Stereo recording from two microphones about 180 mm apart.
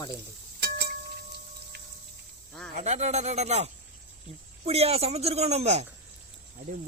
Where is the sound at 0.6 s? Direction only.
60° right (ahead or behind).